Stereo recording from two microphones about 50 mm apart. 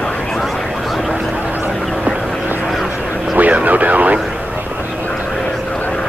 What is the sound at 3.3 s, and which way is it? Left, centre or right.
Vehicle, right.